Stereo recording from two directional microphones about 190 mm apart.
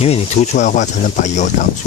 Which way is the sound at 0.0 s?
35° left (ahead or behind).